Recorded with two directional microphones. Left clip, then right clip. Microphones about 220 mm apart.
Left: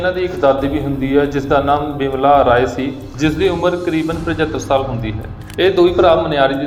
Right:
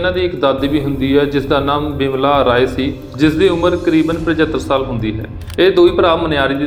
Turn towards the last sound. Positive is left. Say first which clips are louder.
# left 1 dB
turn(degrees=-45)  # may be behind; listen again after turning